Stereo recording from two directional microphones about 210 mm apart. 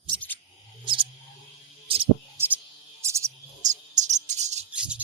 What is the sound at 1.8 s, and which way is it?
Music, 25° right (ahead or behind).